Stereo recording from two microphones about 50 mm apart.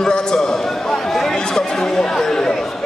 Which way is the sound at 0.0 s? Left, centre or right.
Centre.